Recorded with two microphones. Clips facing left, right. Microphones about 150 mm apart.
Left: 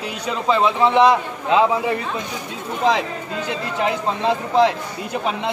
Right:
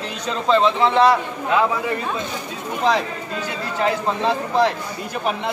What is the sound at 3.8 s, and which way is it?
Speech, 15° left (ahead or behind).